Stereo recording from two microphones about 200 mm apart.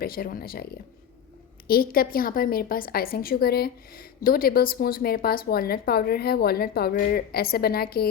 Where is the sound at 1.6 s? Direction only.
45° left (ahead or behind).